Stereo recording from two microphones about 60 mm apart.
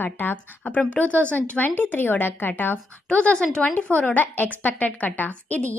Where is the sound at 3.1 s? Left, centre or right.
Centre.